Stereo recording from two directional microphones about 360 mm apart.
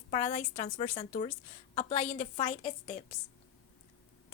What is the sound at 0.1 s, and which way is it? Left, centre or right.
A woman's voice, left.